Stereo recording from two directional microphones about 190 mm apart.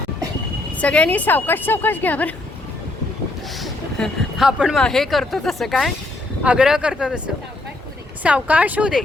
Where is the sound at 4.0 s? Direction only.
Centre (ahead or behind).